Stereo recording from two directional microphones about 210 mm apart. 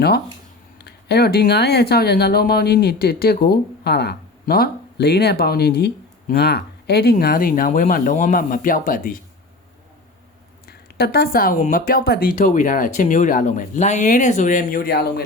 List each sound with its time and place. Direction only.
0.8 s speech: 50° left (ahead or behind)
10.7 s speech: 50° left (ahead or behind)